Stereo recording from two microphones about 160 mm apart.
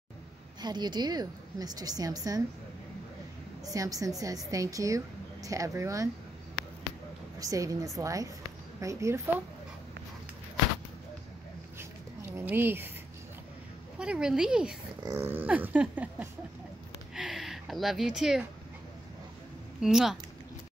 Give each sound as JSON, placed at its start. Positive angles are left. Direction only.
{"t": 0.6, "sound": "a woman's voice", "side_deg": -25}
{"t": 3.7, "sound": "a woman's voice", "side_deg": -20}
{"t": 7.3, "sound": "a woman's voice", "side_deg": -20}
{"t": 8.8, "sound": "a sound", "side_deg": -15}
{"t": 11.8, "sound": "a sound", "side_deg": -15}
{"t": 13.9, "sound": "speech", "side_deg": -5}
{"t": 15.0, "sound": "a sound", "side_deg": -15}
{"t": 17.1, "sound": "gasp", "side_deg": 0}
{"t": 19.8, "sound": "speech", "side_deg": -5}